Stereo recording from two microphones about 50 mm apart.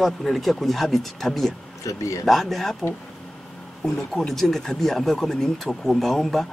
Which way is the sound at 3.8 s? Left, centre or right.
Centre.